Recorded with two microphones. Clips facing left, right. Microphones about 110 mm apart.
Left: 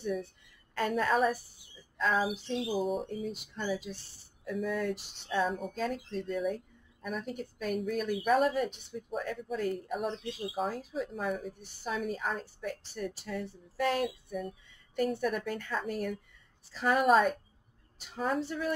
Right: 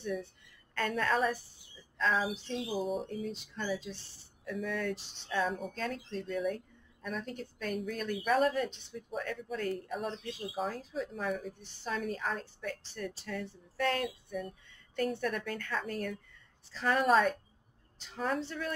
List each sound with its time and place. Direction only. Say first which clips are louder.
0.7 s a woman's voice: left 3 dB; 10° left (ahead or behind)